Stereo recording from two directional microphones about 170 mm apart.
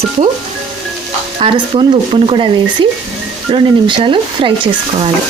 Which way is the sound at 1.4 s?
35° right (ahead or behind).